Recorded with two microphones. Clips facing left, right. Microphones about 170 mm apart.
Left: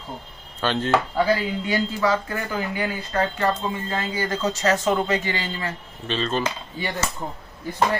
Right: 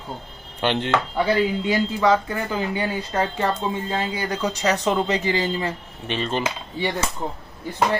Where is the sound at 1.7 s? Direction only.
20° right (ahead or behind).